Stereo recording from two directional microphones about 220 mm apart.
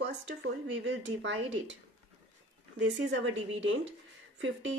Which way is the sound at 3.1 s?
55° right (ahead or behind).